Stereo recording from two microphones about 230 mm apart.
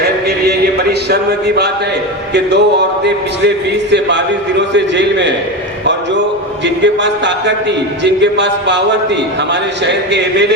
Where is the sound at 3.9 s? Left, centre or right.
Right.